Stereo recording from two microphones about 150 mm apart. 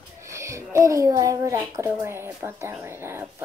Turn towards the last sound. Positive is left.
turn(degrees=-15)  # may be behind; listen again after turning